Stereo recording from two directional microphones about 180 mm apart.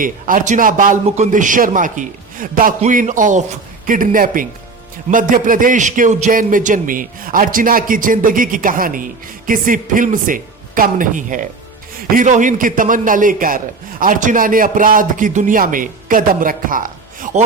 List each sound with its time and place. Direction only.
0.0 s a man's voice: 50° right (ahead or behind)